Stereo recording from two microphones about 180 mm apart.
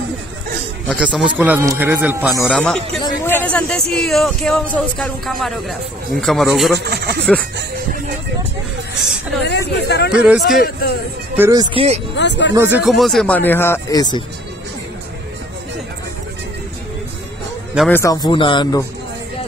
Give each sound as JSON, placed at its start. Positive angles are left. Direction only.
{"t": 0.8, "sound": "speech", "side_deg": -5}
{"t": 2.4, "sound": "speech", "side_deg": 5}
{"t": 6.8, "sound": "a sound", "side_deg": -70}
{"t": 9.4, "sound": "speech", "side_deg": 70}
{"t": 10.1, "sound": "speech", "side_deg": 0}
{"t": 10.6, "sound": "speech", "side_deg": 55}
{"t": 11.3, "sound": "speech", "side_deg": -20}
{"t": 12.2, "sound": "speech", "side_deg": 80}
{"t": 12.5, "sound": "speech", "side_deg": -10}
{"t": 12.8, "sound": "speech", "side_deg": 0}
{"t": 17.8, "sound": "speech", "side_deg": 15}